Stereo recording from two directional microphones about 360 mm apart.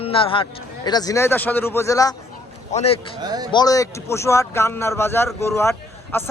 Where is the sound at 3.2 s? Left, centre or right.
Centre.